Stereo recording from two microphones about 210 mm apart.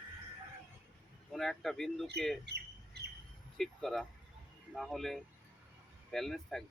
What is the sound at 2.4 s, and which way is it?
Squawk, 50° right (ahead or behind).